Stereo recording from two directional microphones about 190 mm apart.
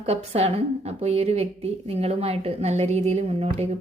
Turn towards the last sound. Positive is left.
turn(degrees=-35)  # may be behind; listen again after turning